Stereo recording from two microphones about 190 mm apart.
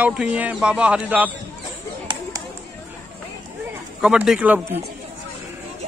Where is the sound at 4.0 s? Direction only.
5° right (ahead or behind).